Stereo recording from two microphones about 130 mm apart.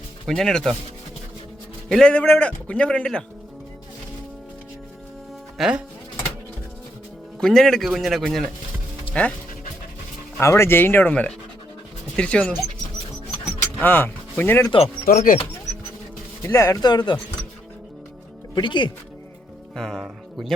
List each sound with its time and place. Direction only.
0.3 s speech: 5° left (ahead or behind)
1.9 s a man's voice: 5° left (ahead or behind)
5.5 s speech: 5° right (ahead or behind)
7.3 s a man's voice: 5° left (ahead or behind)
10.4 s a man's voice: 20° left (ahead or behind)
13.8 s speech: 15° left (ahead or behind)
15.0 s speech: 90° left
16.4 s speech: 25° left (ahead or behind)
18.5 s speech: 35° left (ahead or behind)
19.7 s speech: 5° left (ahead or behind)